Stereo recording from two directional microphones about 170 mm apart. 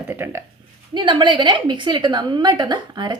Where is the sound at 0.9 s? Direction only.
30° right (ahead or behind).